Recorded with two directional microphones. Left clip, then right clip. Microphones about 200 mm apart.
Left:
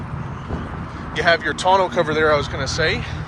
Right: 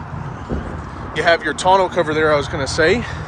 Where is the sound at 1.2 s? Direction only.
25° right (ahead or behind).